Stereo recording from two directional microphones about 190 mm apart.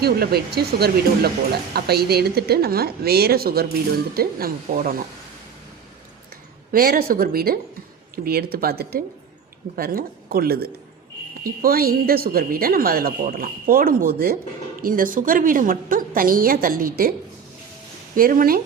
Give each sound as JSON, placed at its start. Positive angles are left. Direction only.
{"t": 0.0, "sound": "a woman's voice", "side_deg": -55}
{"t": 6.7, "sound": "a woman's voice", "side_deg": -50}